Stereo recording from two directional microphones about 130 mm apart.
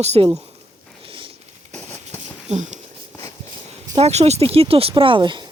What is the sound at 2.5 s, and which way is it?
Speech, 65° right (ahead or behind).